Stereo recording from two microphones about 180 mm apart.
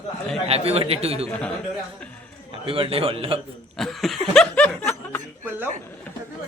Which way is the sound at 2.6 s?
30° right (ahead or behind).